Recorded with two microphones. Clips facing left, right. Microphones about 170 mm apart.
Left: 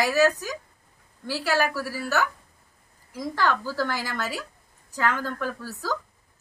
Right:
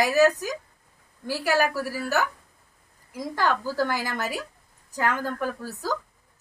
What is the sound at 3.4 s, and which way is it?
Speech, 15° right (ahead or behind).